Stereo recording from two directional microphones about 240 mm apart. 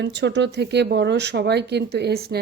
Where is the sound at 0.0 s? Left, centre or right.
Right.